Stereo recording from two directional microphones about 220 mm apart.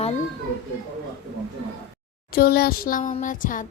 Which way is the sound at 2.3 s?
45° left (ahead or behind).